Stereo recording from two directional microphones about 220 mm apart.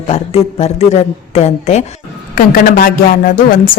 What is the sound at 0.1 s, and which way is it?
Speech, 30° left (ahead or behind).